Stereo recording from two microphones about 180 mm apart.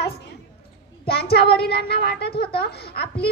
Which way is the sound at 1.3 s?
60° left (ahead or behind).